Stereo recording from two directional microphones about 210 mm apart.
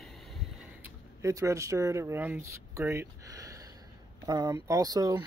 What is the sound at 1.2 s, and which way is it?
Speech, 15° right (ahead or behind).